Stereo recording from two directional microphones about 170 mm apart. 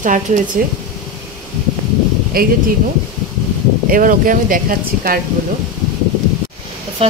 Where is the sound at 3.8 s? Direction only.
55° right (ahead or behind).